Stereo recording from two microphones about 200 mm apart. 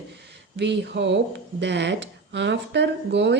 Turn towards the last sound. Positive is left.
turn(degrees=-60)  # may be behind; listen again after turning